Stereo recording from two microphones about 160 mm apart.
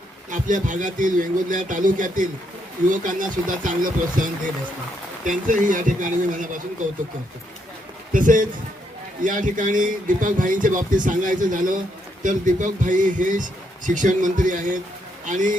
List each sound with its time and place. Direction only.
0.3 s speech: 55° right (ahead or behind)
8.1 s a man's voice: 55° right (ahead or behind)